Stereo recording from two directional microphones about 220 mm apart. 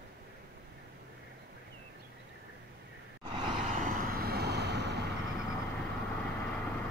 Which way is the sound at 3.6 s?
35° right (ahead or behind).